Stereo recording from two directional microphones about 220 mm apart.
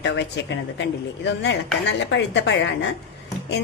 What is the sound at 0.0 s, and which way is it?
A woman's voice, 50° left (ahead or behind).